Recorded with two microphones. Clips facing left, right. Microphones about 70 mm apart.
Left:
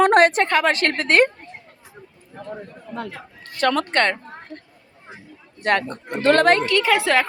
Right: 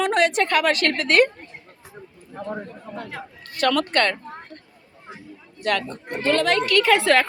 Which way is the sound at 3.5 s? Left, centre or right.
Left.